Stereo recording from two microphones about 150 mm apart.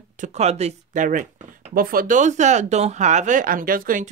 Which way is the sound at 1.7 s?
75° right (ahead or behind).